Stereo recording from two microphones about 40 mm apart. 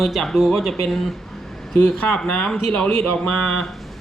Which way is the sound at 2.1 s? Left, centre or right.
Left.